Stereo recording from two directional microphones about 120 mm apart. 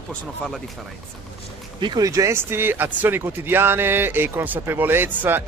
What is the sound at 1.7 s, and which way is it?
Speech, 35° right (ahead or behind).